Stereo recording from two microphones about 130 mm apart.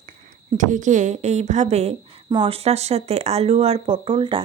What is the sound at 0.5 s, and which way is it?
A woman's voice, 75° right (ahead or behind).